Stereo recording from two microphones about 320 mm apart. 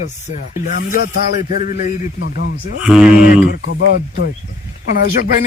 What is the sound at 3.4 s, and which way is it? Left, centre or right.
Speech, left.